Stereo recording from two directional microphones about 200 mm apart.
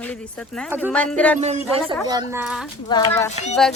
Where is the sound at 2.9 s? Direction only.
15° left (ahead or behind).